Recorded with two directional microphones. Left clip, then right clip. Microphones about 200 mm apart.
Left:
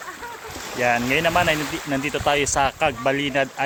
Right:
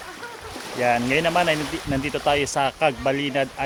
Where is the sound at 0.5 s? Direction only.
25° left (ahead or behind).